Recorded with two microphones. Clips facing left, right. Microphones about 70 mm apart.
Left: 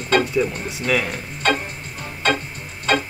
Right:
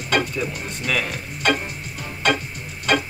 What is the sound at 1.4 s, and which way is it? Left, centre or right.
Music, left.